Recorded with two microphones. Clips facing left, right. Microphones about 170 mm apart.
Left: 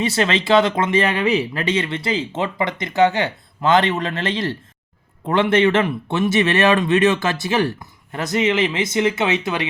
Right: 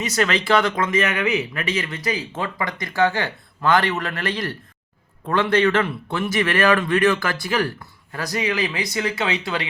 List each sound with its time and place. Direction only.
0.0 s speech: 25° left (ahead or behind)